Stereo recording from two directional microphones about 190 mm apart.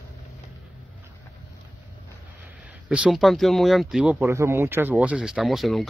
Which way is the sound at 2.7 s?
5° right (ahead or behind).